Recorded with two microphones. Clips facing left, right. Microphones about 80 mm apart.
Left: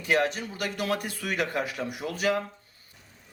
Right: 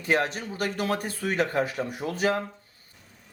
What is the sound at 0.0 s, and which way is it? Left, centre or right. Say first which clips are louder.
Speech: even; right.